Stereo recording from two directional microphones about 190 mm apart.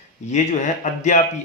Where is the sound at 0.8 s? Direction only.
40° left (ahead or behind).